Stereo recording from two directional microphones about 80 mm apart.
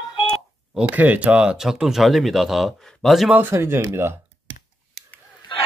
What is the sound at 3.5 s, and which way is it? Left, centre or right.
Speech, right.